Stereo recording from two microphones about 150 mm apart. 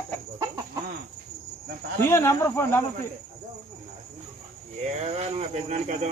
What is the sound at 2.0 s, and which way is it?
Speech, 15° left (ahead or behind).